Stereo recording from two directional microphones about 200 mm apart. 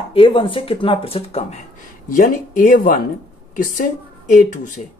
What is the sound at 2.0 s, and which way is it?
Speech, 40° left (ahead or behind).